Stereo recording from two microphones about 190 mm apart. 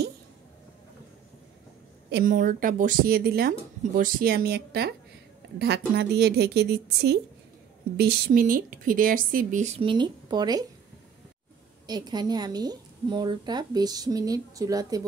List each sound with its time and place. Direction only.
2.0 s a woman's voice: 50° right (ahead or behind)
8.0 s speech: 45° right (ahead or behind); by 10.6 s 20° right (ahead or behind)
11.9 s a woman's voice: 20° right (ahead or behind)